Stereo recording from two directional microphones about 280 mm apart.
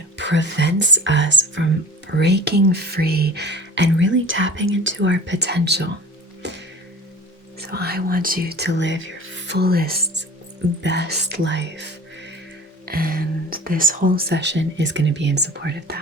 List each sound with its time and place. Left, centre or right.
0.2 s speech: right
6.4 s music: right
7.6 s speech: right
12.8 s speech: right